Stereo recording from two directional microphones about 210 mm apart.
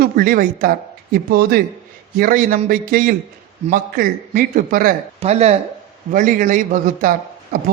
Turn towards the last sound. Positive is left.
turn(degrees=-40)  # may be behind; listen again after turning